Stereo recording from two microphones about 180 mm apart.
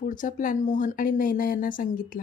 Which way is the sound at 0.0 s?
45° left (ahead or behind).